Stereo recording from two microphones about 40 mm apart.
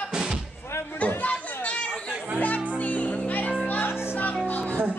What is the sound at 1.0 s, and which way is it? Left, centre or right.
Chatter, left.